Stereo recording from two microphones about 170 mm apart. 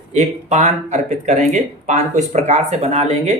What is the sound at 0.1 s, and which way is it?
Speech, 40° right (ahead or behind).